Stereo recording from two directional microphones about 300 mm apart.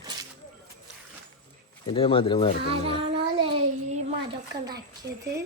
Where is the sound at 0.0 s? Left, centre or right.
Centre.